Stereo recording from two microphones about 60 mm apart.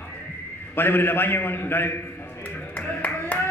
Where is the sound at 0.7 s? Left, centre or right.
Left.